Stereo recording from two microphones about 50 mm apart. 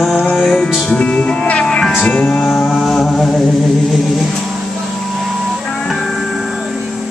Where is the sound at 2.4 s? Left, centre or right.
Centre.